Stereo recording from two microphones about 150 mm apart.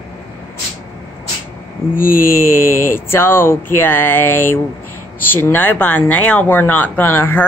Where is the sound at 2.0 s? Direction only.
70° left (ahead or behind).